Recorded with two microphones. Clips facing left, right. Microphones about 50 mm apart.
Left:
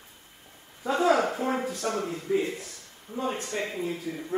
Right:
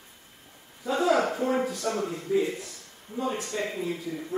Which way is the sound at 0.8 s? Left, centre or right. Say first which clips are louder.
Left 1 dB; left.